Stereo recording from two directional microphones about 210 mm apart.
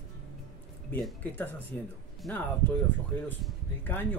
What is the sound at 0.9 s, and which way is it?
Speech, 10° left (ahead or behind).